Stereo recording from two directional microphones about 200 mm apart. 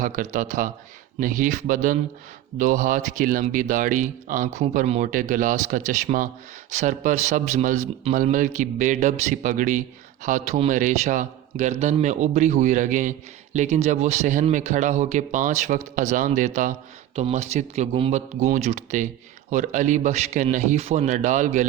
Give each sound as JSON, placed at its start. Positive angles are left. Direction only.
{"t": 0.0, "sound": "speech", "side_deg": -40}